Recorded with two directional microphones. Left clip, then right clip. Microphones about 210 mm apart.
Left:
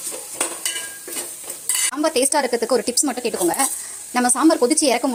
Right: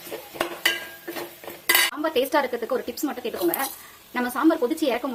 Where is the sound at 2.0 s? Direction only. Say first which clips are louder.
Left 3 dB; 35° left (ahead or behind).